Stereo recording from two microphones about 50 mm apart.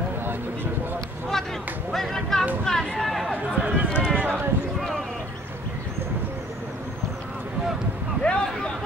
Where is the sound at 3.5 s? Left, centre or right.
Right.